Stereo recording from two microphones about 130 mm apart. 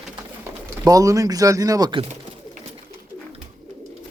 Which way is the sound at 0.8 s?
25° right (ahead or behind).